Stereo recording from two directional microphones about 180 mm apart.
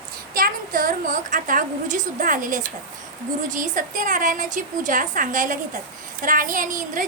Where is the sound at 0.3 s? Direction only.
50° right (ahead or behind).